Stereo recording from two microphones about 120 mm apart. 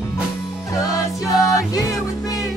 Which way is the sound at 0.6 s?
30° left (ahead or behind).